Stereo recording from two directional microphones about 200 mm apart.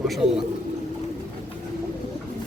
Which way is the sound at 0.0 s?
Centre (ahead or behind).